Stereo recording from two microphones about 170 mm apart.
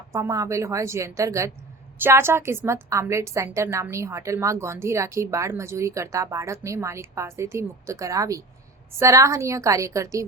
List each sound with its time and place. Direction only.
0.1 s a woman's voice: 20° right (ahead or behind)